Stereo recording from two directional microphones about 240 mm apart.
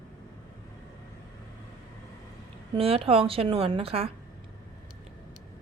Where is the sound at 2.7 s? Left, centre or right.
Right.